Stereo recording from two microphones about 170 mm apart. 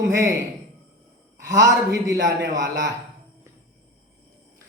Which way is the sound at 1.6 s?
20° right (ahead or behind).